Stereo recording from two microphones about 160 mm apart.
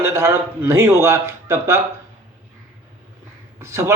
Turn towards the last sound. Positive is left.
turn(degrees=-15)  # may be behind; listen again after turning